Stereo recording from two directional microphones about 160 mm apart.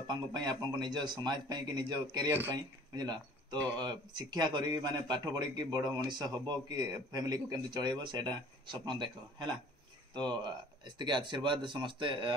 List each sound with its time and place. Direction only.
0.0 s speech: 25° right (ahead or behind)
10.1 s speech: 30° right (ahead or behind)